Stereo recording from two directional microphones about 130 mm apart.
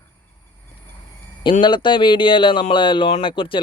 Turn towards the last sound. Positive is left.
turn(degrees=40)  # may be behind; listen again after turning